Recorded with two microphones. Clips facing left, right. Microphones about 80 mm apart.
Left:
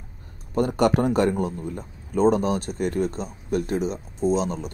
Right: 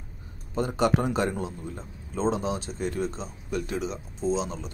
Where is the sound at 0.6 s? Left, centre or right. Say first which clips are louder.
Left 4 dB; left.